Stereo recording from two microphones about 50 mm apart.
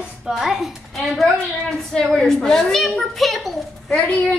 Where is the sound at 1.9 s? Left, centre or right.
Centre.